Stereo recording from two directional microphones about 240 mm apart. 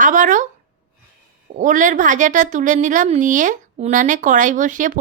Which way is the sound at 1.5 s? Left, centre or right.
Right.